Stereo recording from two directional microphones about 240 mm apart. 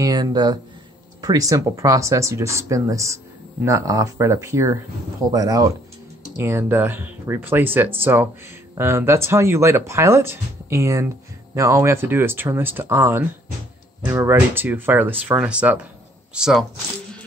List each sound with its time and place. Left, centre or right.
0.0 s speech: centre